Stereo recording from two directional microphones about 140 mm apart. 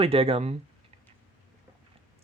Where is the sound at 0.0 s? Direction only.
45° right (ahead or behind).